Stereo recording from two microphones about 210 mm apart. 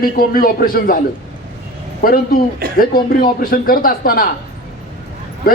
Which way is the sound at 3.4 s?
45° left (ahead or behind).